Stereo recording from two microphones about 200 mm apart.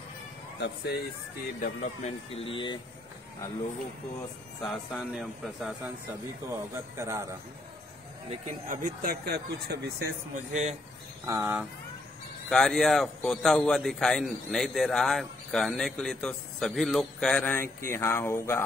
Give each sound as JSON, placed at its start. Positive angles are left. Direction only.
{"t": 0.6, "sound": "speech", "side_deg": 55}
{"t": 1.6, "sound": "speech", "side_deg": 35}
{"t": 4.6, "sound": "a man's voice", "side_deg": 0}
{"t": 6.5, "sound": "speech", "side_deg": -15}
{"t": 8.3, "sound": "speech", "side_deg": -35}
{"t": 10.3, "sound": "speech", "side_deg": -35}
{"t": 11.2, "sound": "speech", "side_deg": -10}
{"t": 12.4, "sound": "a man's voice", "side_deg": 0}